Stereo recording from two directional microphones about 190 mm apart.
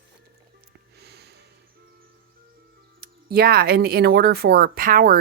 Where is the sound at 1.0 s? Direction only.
60° right (ahead or behind).